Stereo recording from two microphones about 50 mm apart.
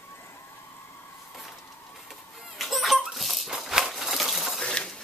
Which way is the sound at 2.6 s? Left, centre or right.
Centre.